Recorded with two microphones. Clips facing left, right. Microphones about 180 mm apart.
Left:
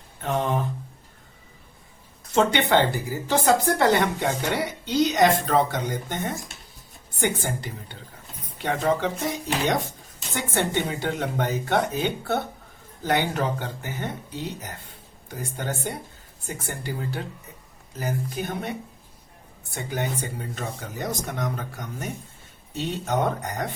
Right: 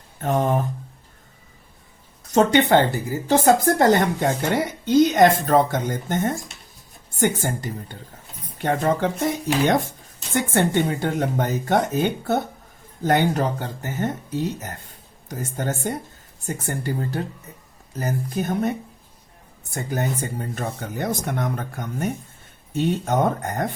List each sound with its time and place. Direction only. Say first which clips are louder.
0.2 s speech: right 4 dB; 45° right (ahead or behind)
2.3 s speech: right 4 dB; 40° right (ahead or behind)
19.7 s speech: right 3 dB; 45° right (ahead or behind)